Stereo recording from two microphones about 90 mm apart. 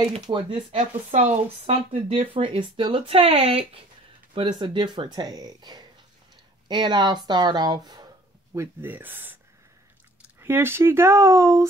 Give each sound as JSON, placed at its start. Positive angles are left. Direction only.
{"t": 0.0, "sound": "speech", "side_deg": -75}
{"t": 4.3, "sound": "speech", "side_deg": -65}
{"t": 8.5, "sound": "speech", "side_deg": -20}
{"t": 10.4, "sound": "speech", "side_deg": -25}